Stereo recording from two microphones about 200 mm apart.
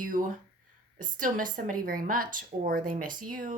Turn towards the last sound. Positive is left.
turn(degrees=-45)  # may be behind; listen again after turning